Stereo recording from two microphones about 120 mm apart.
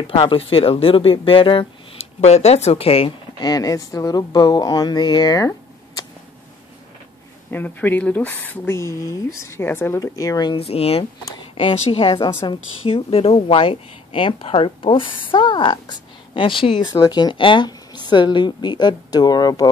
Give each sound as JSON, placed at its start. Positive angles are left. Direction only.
{"t": 0.0, "sound": "speech", "side_deg": 50}
{"t": 2.2, "sound": "speech", "side_deg": 65}
{"t": 3.3, "sound": "a woman's voice", "side_deg": 35}
{"t": 7.5, "sound": "speech", "side_deg": 15}
{"t": 10.5, "sound": "a woman's voice", "side_deg": 55}